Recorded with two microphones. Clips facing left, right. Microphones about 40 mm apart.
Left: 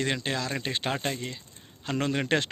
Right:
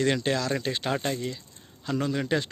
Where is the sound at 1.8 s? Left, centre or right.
Left.